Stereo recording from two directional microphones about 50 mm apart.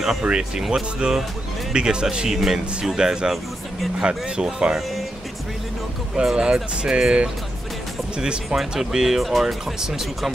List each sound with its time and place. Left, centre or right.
0.4 s speech: centre
2.2 s speech: centre
6.1 s speech: centre